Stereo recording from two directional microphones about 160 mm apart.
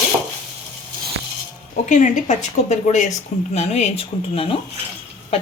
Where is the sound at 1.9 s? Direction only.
50° left (ahead or behind).